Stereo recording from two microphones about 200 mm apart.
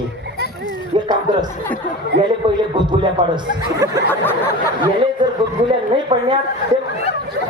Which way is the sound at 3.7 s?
15° right (ahead or behind).